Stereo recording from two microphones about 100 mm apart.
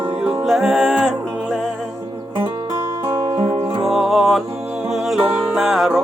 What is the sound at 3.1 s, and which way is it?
Music, 40° right (ahead or behind).